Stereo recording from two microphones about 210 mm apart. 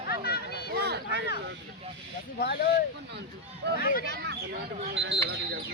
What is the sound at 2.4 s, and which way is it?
Speech, 50° left (ahead or behind).